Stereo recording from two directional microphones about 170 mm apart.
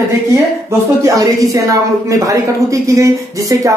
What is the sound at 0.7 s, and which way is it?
Speech, 20° right (ahead or behind).